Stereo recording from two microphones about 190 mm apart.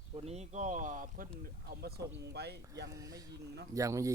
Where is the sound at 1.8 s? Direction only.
55° right (ahead or behind).